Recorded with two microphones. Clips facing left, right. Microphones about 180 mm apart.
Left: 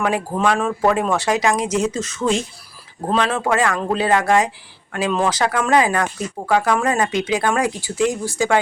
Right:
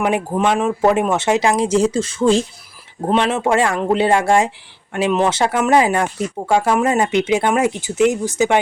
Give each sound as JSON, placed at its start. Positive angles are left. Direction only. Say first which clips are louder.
{"t": 0.0, "sound": "speech", "louder": "right 2 dB", "side_deg": -20}